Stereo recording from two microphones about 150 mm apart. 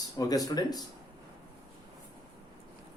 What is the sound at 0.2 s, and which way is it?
Speech, 25° left (ahead or behind).